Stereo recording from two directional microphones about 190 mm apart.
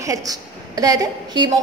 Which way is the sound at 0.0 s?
15° right (ahead or behind).